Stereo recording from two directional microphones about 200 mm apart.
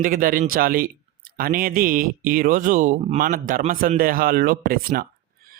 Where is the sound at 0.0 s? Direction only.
45° right (ahead or behind).